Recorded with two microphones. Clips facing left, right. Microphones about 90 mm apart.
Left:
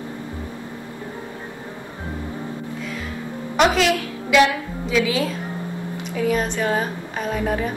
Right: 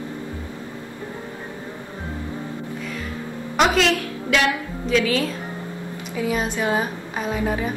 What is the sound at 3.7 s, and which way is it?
A woman's voice, 5° left (ahead or behind).